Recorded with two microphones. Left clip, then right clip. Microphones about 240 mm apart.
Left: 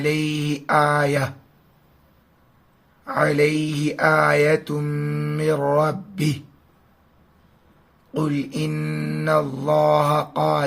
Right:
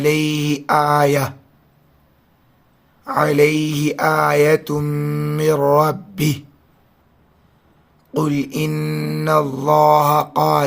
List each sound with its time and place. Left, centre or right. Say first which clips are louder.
0.0 s mantra: right 5 dB; right
3.0 s mantra: right 4 dB; right
8.1 s mantra: right 5 dB; right